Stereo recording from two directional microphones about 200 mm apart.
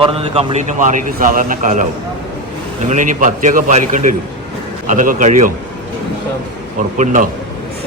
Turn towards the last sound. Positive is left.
turn(degrees=-40)  # may be behind; listen again after turning